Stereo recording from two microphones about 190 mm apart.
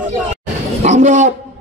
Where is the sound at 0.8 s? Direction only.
40° right (ahead or behind).